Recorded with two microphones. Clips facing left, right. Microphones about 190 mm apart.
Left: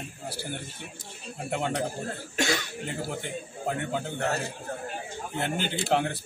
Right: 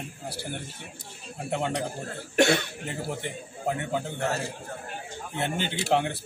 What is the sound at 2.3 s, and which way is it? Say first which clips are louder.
Speech: right 7 dB; 60° right (ahead or behind).